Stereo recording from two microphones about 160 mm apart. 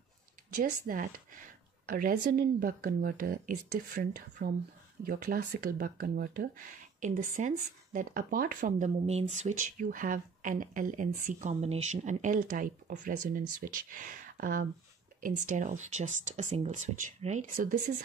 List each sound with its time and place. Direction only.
0.6 s speech: 60° right (ahead or behind)
17.6 s speech: 60° right (ahead or behind)